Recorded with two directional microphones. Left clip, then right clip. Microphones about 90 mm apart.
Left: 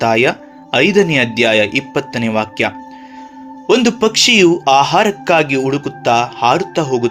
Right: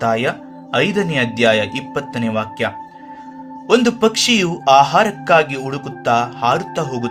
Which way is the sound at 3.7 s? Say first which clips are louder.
Left 2 dB; 25° left (ahead or behind).